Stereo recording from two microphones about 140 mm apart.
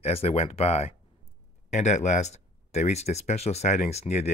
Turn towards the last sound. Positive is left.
turn(degrees=50)  # may be behind; listen again after turning